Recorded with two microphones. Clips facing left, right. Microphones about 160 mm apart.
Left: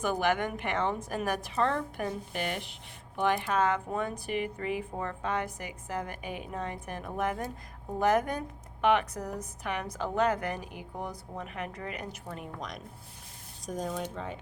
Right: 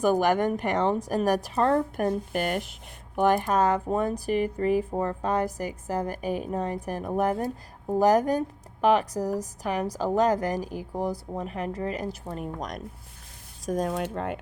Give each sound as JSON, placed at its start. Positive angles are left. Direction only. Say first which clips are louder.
{"t": 0.0, "sound": "speech", "louder": "right 6 dB", "side_deg": -40}
{"t": 13.7, "sound": "speech", "louder": "right 7 dB", "side_deg": -70}